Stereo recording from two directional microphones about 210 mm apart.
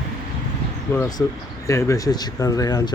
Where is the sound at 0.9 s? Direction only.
10° left (ahead or behind).